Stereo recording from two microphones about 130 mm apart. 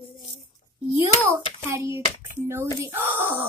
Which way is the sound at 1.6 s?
20° right (ahead or behind).